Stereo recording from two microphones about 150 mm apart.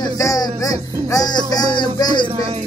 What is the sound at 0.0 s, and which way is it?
Music, 25° left (ahead or behind).